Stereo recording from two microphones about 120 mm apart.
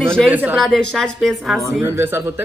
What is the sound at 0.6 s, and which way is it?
A woman's voice, 5° left (ahead or behind).